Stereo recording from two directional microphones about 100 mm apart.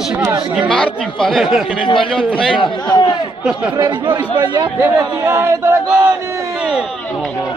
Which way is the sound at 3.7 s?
45° right (ahead or behind).